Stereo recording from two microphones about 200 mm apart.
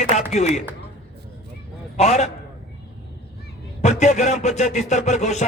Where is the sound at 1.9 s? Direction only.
35° left (ahead or behind).